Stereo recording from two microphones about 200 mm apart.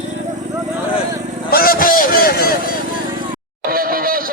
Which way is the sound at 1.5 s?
50° left (ahead or behind).